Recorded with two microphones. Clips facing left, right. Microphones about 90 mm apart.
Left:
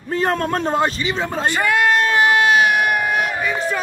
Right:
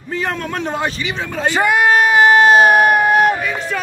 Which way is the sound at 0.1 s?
40° left (ahead or behind).